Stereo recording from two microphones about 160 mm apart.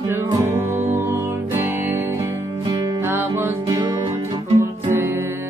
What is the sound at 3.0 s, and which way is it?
Music, 15° right (ahead or behind).